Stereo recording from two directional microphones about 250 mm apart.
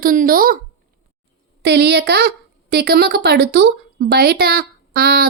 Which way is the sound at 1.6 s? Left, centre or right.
Right.